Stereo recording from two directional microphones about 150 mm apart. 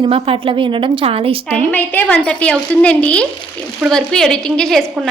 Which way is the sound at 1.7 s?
10° left (ahead or behind).